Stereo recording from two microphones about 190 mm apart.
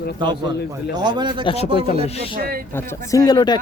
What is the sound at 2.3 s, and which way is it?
Speech, 50° right (ahead or behind).